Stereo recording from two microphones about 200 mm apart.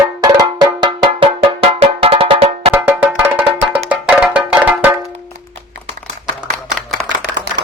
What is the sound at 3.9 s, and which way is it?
Music, 5° right (ahead or behind).